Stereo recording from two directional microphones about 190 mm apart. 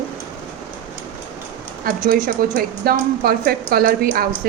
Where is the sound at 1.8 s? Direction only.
45° right (ahead or behind).